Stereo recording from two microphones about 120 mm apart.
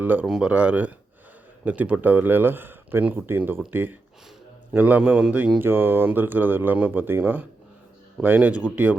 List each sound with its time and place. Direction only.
0.0 s speech: 15° right (ahead or behind)